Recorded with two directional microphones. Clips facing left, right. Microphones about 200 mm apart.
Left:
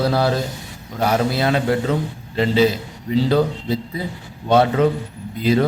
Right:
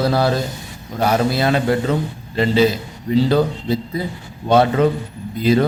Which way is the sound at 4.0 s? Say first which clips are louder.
Right 3 dB; 40° right (ahead or behind).